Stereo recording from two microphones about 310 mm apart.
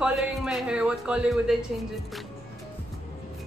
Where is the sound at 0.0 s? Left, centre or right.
Centre.